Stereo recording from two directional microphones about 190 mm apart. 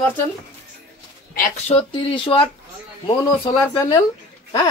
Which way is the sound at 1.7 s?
30° left (ahead or behind).